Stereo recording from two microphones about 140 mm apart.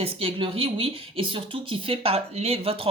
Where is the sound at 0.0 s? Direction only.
40° right (ahead or behind).